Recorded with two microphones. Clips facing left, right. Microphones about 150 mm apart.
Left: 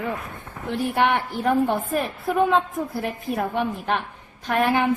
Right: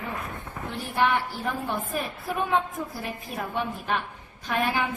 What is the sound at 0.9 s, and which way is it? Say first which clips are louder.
A woman's voice: left 1 dB; 60° left (ahead or behind).